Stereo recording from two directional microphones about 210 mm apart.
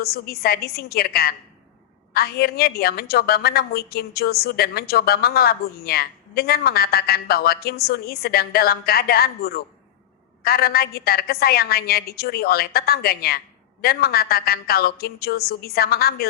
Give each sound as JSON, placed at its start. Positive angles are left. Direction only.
{"t": 0.0, "sound": "a woman's voice", "side_deg": 45}